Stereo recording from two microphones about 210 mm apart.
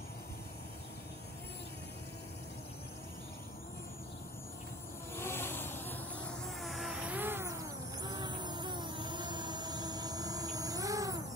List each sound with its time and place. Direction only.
5.1 s music: 10° left (ahead or behind); by 7.5 s 10° right (ahead or behind)
8.0 s vehicle: 20° right (ahead or behind)